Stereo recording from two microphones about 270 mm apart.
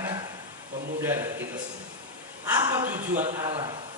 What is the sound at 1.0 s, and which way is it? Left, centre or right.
Speech, centre.